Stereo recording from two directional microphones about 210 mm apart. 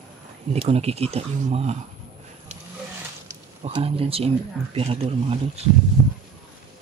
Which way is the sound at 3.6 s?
25° right (ahead or behind).